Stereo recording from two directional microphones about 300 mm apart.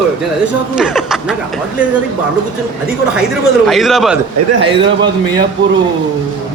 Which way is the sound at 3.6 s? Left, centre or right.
Centre.